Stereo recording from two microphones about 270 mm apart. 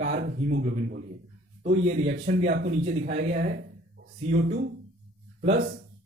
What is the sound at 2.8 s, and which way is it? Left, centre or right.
Speech, right.